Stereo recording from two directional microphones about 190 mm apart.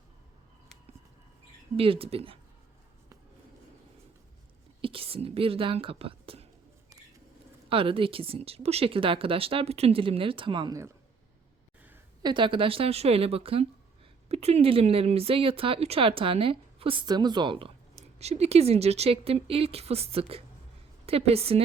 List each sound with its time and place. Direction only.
1.7 s speech: 30° right (ahead or behind)
4.8 s speech: 30° right (ahead or behind)
7.7 s speech: 30° right (ahead or behind)
12.2 s speech: 25° right (ahead or behind)